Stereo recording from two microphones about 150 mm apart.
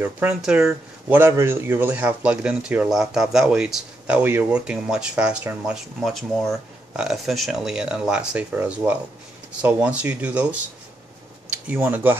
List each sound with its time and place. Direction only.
0.0 s speech: 15° right (ahead or behind)
0.4 s speech: 5° right (ahead or behind)